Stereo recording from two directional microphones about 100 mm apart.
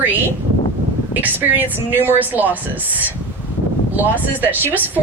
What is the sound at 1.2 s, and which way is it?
A woman's voice, 15° right (ahead or behind).